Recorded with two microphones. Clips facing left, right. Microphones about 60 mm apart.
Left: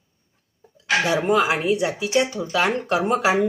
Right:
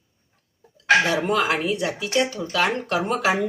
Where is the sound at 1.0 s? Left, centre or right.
Centre.